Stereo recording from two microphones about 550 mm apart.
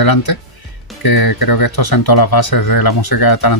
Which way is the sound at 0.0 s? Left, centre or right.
Left.